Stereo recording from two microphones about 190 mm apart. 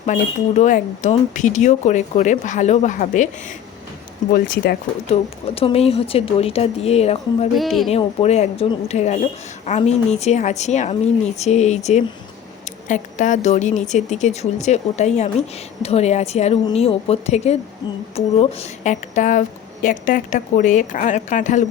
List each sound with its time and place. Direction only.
0.0 s speech: 40° left (ahead or behind)
4.3 s speech: 50° left (ahead or behind)
5.1 s speech: 30° left (ahead or behind)
7.5 s speech: centre (ahead or behind)
7.9 s speech: 35° left (ahead or behind)